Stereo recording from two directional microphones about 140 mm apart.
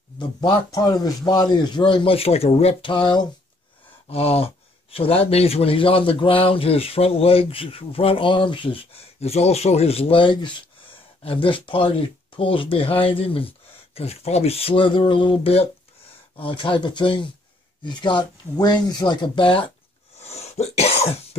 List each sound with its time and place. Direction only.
0.2 s speech: 30° left (ahead or behind)
4.1 s speech: 45° left (ahead or behind)
20.2 s cough: 50° left (ahead or behind)